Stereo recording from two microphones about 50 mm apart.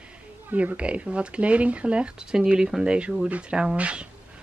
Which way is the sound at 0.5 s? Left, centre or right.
Right.